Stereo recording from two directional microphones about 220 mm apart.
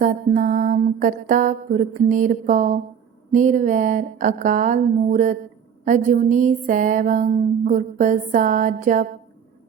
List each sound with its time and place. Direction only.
0.0 s speech: 35° right (ahead or behind)